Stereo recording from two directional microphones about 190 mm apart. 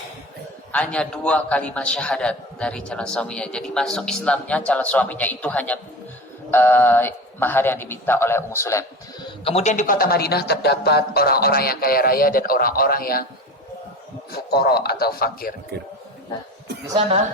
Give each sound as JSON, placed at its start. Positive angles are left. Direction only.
{"t": 0.7, "sound": "a man's voice", "side_deg": 5}
{"t": 9.4, "sound": "speech", "side_deg": 30}
{"t": 14.3, "sound": "a man's voice", "side_deg": 55}